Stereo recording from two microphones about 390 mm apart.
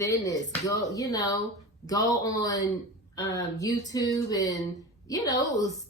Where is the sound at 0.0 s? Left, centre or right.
Centre.